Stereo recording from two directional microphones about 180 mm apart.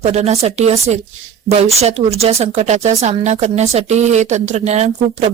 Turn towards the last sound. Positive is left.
turn(degrees=-40)  # may be behind; listen again after turning